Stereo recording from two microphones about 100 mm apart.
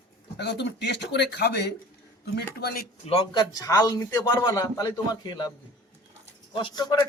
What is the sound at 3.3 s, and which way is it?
Speech, 45° left (ahead or behind).